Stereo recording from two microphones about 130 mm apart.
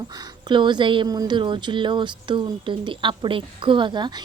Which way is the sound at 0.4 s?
35° right (ahead or behind).